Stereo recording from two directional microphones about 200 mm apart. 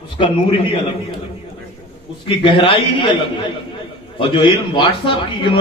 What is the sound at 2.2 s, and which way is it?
A man's voice, 25° left (ahead or behind).